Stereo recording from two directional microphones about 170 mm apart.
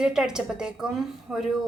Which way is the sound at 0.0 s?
5° right (ahead or behind).